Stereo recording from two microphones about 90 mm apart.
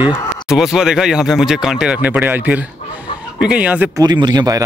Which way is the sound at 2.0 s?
20° right (ahead or behind).